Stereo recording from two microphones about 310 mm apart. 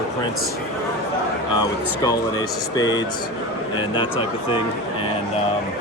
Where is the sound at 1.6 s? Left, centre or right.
Centre.